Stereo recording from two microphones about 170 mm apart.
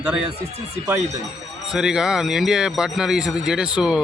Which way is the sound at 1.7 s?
5° right (ahead or behind).